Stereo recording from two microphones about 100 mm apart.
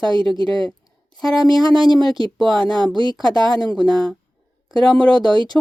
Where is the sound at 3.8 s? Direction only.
Centre (ahead or behind).